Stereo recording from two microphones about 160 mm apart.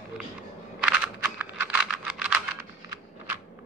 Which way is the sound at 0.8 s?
5° right (ahead or behind).